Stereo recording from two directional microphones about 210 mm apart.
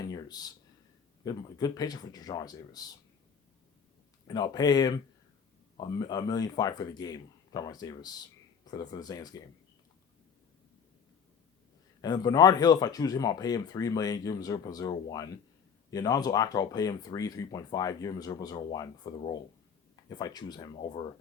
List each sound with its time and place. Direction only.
0.0 s a sound: 20° left (ahead or behind)
1.2 s speech: 20° left (ahead or behind)
4.3 s speech: 20° left (ahead or behind)
12.0 s speech: 20° left (ahead or behind)